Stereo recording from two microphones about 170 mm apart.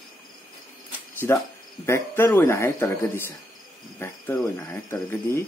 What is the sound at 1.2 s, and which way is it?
Speech, 10° left (ahead or behind).